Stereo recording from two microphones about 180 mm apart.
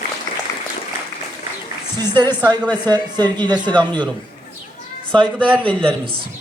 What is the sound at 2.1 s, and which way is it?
Speech, 25° right (ahead or behind).